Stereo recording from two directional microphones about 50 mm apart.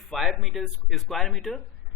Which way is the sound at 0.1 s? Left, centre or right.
Centre.